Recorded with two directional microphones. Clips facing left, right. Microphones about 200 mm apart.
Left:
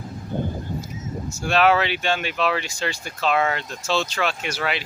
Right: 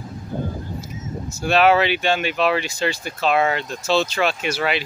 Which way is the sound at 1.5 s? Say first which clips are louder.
Right 3 dB; 15° right (ahead or behind).